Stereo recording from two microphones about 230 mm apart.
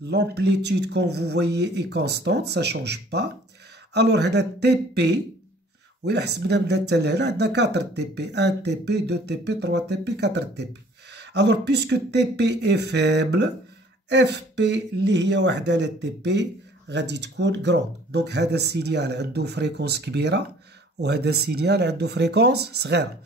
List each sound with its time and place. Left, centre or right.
0.0 s speech: right